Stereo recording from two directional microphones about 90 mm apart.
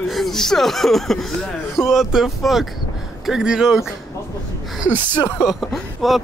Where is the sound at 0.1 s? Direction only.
Centre (ahead or behind).